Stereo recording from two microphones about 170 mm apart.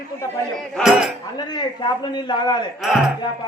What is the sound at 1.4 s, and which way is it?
A man's voice, 25° left (ahead or behind).